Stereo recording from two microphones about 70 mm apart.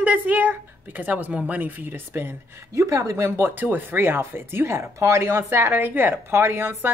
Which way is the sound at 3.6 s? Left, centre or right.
Right.